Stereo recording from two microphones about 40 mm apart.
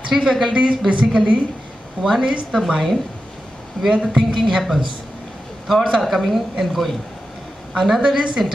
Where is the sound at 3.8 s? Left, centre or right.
Centre.